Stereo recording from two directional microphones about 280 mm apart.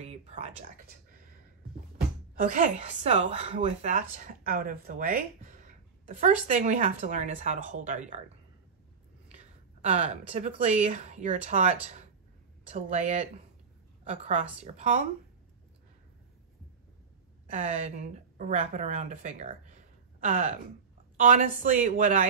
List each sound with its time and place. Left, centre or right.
0.0 s speech: right
2.3 s a woman's voice: right
9.8 s speech: right
17.5 s speech: right